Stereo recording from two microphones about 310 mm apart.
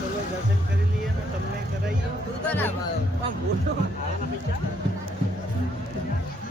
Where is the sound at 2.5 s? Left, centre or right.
Centre.